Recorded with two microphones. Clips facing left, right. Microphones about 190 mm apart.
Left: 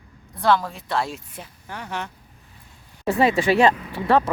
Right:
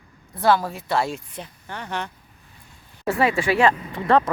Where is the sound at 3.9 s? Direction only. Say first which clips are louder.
Even; 5° left (ahead or behind).